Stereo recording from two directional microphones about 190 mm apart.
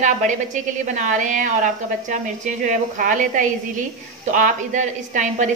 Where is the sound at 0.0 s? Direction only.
40° right (ahead or behind).